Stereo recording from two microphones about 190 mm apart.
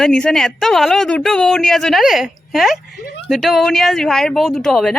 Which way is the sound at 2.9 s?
60° left (ahead or behind).